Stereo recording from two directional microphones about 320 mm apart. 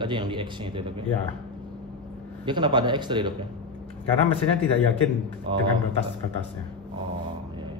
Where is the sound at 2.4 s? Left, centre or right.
Centre.